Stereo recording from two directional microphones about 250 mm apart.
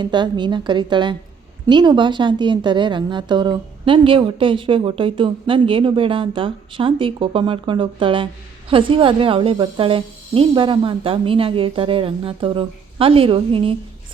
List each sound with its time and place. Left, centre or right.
0.0 s a woman's voice: centre